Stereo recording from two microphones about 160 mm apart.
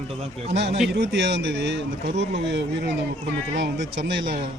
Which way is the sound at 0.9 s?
90° right.